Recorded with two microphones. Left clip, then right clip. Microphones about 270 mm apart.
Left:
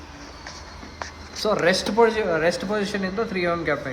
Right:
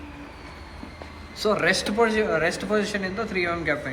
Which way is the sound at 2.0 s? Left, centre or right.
Left.